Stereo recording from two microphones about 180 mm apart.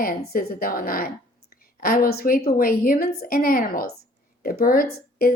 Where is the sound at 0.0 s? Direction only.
60° left (ahead or behind).